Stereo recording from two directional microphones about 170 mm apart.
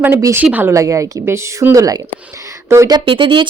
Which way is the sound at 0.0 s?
15° right (ahead or behind).